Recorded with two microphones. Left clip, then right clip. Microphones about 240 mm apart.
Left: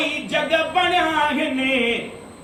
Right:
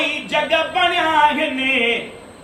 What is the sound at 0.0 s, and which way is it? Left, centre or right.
Chant, centre.